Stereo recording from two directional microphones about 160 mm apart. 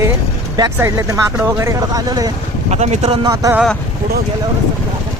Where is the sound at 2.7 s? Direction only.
45° right (ahead or behind).